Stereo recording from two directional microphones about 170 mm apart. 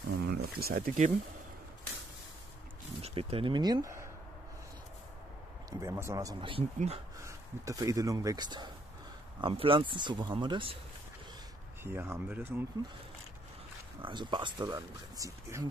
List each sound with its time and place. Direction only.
0.1 s a sound: 70° right (ahead or behind)
3.0 s speech: 35° right (ahead or behind); by 4.1 s 15° right (ahead or behind)
5.7 s speech: 20° right (ahead or behind)
6.4 s speech: 35° right (ahead or behind)
7.2 s speech: 20° right (ahead or behind)
11.8 s speech: 15° right (ahead or behind)
14.0 s speech: 30° right (ahead or behind)